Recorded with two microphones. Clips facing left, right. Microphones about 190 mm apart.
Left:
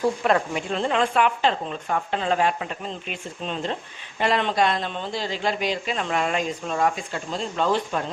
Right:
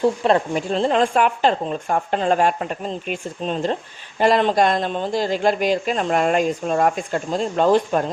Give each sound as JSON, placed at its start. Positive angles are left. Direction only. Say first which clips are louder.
{"t": 0.0, "sound": "speech", "louder": "right 4 dB", "side_deg": -25}